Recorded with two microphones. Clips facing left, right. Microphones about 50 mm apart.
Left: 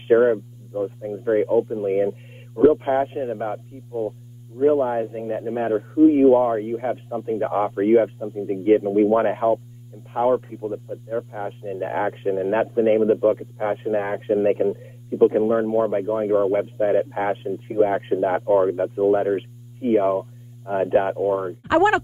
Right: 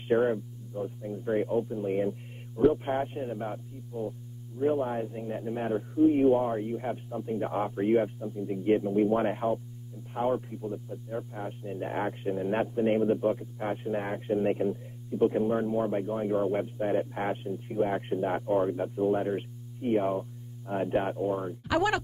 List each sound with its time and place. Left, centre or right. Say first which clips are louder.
0.1 s speech: left 9 dB; left